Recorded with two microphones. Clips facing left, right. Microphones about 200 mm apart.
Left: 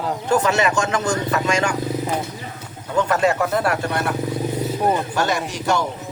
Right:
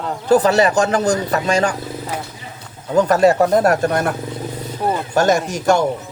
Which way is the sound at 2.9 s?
40° right (ahead or behind).